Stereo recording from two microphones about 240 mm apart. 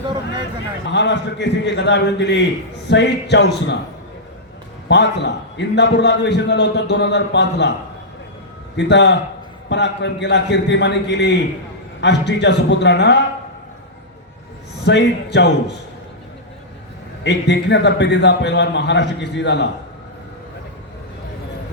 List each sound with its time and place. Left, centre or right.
0.9 s a man's voice: left
4.9 s a man's voice: left
8.7 s a man's voice: left
14.8 s a man's voice: left
17.2 s a man's voice: left